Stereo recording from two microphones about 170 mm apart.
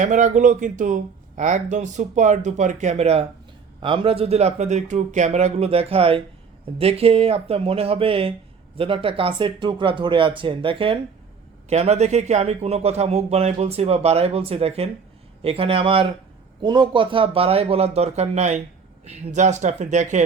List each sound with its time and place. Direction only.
0.0 s speech: 45° right (ahead or behind)